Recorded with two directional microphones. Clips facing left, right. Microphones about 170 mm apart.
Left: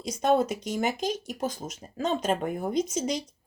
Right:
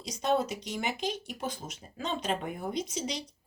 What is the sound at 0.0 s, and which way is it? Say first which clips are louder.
Speech: left 5 dB; 50° left (ahead or behind).